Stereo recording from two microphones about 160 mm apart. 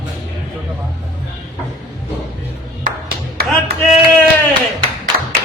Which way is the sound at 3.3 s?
70° right (ahead or behind).